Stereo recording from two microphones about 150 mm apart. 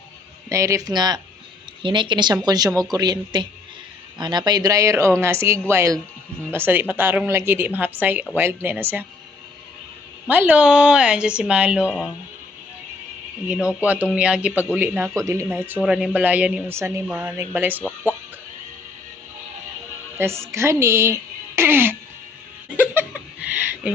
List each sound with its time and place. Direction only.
0.5 s speech: 20° right (ahead or behind)
10.2 s speech: 10° right (ahead or behind)
13.5 s speech: 5° right (ahead or behind)
20.1 s speech: 15° right (ahead or behind)
22.8 s a sound: 10° right (ahead or behind)